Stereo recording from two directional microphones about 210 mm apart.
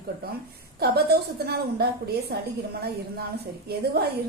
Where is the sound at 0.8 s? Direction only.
50° right (ahead or behind).